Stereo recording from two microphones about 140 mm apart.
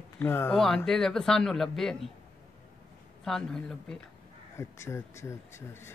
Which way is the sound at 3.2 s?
5° left (ahead or behind).